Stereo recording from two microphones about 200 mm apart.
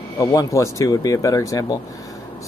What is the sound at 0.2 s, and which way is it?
Speech, 15° left (ahead or behind).